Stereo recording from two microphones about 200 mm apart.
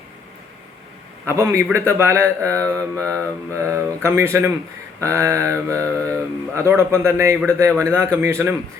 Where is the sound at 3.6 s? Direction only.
15° right (ahead or behind).